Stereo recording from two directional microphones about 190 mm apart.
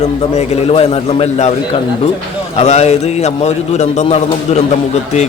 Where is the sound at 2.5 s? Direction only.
35° left (ahead or behind).